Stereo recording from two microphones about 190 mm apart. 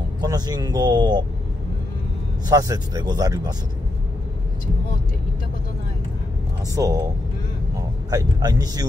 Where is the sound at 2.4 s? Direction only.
20° right (ahead or behind).